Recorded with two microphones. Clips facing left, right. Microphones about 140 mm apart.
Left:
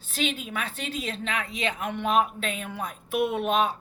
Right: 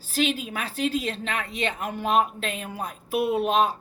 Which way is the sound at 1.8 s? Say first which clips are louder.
Right 1 dB; 35° right (ahead or behind).